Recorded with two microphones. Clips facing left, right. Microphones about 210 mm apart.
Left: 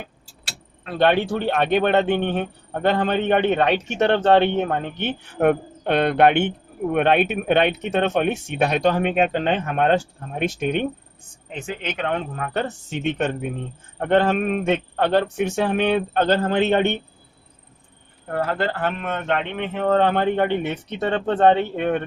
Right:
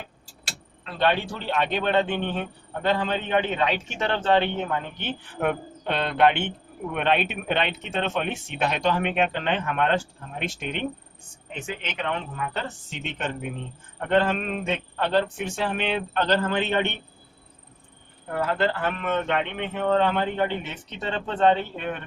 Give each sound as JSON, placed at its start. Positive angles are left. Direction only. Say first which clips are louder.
{"t": 0.9, "sound": "a man's voice", "louder": "left 6 dB", "side_deg": 60}
{"t": 8.4, "sound": "a man's voice", "louder": "left 5 dB", "side_deg": 45}
{"t": 18.3, "sound": "a man's voice", "louder": "left 1 dB", "side_deg": 45}